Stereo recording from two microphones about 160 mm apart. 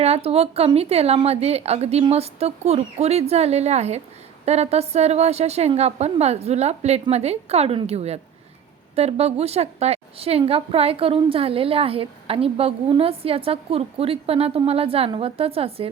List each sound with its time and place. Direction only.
0.0 s a woman's voice: 40° right (ahead or behind)